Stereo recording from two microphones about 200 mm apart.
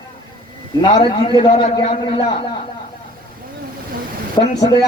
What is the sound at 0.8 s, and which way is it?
A man's voice, 20° left (ahead or behind).